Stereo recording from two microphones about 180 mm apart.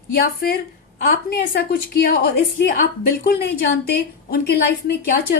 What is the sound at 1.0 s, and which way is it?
A woman's voice, 55° left (ahead or behind).